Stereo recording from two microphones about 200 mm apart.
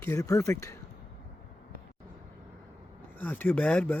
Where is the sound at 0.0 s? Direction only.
15° left (ahead or behind).